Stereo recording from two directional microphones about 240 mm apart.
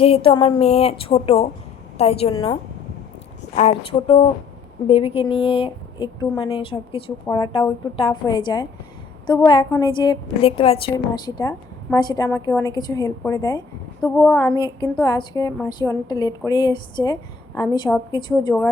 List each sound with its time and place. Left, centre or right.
0.0 s a woman's voice: left
18.1 s a woman's voice: centre